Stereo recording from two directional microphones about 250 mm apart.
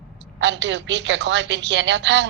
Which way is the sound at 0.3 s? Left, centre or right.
Right.